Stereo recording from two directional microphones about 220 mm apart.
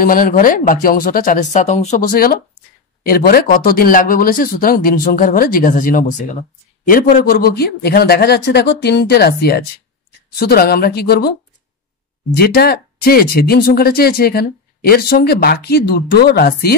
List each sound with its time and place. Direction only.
0.0 s speech: 40° left (ahead or behind)
12.4 s speech: 45° left (ahead or behind)